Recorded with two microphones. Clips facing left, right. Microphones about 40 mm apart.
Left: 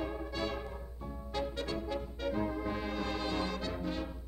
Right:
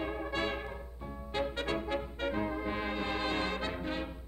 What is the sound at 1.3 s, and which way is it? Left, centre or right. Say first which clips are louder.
Brass instrument: right 3 dB; right.